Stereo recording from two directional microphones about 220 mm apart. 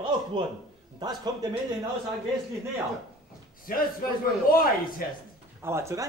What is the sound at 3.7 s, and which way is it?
Speech, 40° left (ahead or behind).